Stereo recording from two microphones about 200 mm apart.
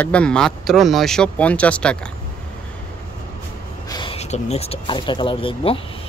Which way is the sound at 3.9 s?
25° left (ahead or behind).